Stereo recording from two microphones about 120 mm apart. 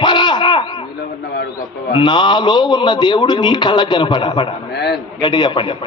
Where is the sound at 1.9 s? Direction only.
40° left (ahead or behind).